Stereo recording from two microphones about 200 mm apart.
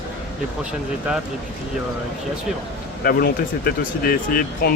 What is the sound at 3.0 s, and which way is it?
Speech, 50° left (ahead or behind).